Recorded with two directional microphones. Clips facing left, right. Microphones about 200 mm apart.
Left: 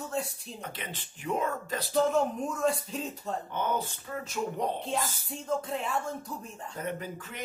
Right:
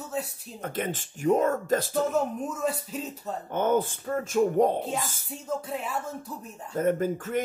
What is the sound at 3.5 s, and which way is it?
Speech, 50° right (ahead or behind).